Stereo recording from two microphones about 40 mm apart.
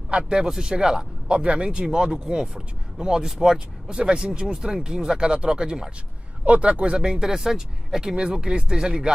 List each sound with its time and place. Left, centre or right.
0.1 s speech: right
1.3 s speech: right
6.4 s speech: right
7.0 s speech: centre